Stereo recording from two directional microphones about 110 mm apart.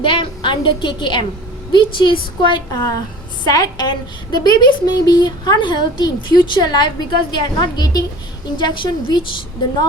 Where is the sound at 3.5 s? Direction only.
35° left (ahead or behind).